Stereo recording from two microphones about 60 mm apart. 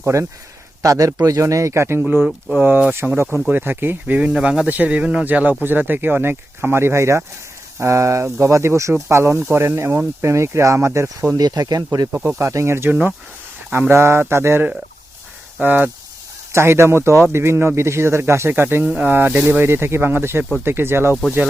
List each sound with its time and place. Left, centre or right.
0.0 s speech: right
0.8 s a man's voice: right
2.6 s speech: right
4.0 s speech: right
10.2 s speech: right
11.3 s speech: right
12.4 s speech: right
12.9 s speech: right
13.9 s speech: right
15.6 s speech: right
16.5 s speech: right